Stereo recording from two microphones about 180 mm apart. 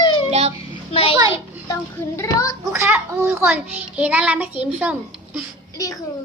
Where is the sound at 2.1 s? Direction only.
15° left (ahead or behind).